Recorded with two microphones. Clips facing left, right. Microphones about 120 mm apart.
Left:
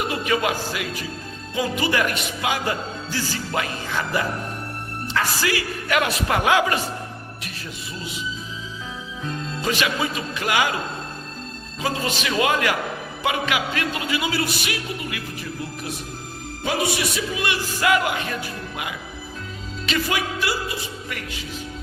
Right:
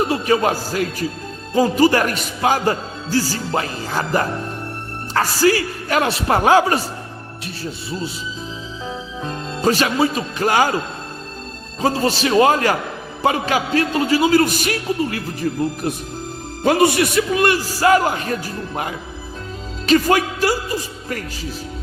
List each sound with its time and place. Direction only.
0.0 s a man's voice: 35° right (ahead or behind)
9.2 s speech: 35° right (ahead or behind)
11.8 s a man's voice: 35° right (ahead or behind)